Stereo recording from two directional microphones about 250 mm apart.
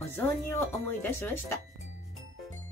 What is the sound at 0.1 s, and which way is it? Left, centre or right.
Speech, centre.